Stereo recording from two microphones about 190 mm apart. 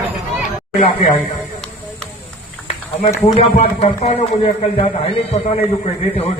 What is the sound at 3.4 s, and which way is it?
Speech, 35° left (ahead or behind).